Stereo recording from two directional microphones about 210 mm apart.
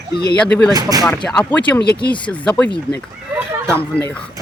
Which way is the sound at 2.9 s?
25° left (ahead or behind).